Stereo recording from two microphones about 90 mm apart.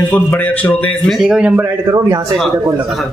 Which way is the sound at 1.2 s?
15° right (ahead or behind).